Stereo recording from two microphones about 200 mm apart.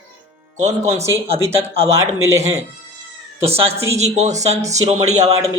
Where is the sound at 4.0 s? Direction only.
35° right (ahead or behind).